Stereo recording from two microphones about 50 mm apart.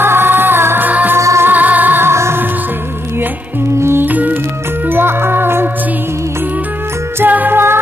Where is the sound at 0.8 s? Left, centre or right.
Right.